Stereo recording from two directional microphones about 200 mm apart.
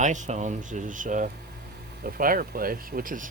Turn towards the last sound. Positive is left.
turn(degrees=-45)  # may be behind; listen again after turning